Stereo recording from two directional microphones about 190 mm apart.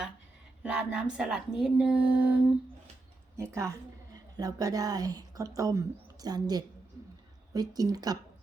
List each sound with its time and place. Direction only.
0.6 s a woman's voice: 5° right (ahead or behind)